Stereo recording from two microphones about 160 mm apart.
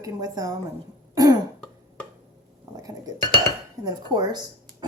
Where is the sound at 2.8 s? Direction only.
25° right (ahead or behind).